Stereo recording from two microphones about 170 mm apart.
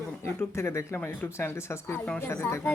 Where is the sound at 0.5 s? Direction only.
15° left (ahead or behind).